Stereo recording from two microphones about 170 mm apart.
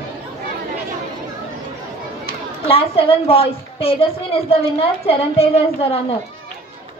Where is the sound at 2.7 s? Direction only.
35° left (ahead or behind).